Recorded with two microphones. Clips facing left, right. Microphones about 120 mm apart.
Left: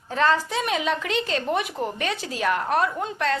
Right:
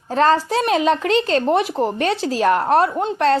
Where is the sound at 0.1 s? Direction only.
35° right (ahead or behind).